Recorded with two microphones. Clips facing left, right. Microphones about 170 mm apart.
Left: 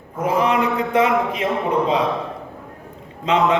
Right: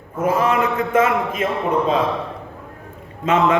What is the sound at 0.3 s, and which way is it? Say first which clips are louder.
A man's voice: left 2 dB; 15° left (ahead or behind).